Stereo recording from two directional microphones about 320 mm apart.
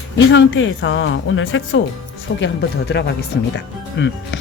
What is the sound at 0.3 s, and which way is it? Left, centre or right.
Speech, left.